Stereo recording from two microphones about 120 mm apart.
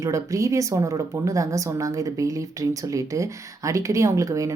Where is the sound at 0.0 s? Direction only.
25° right (ahead or behind).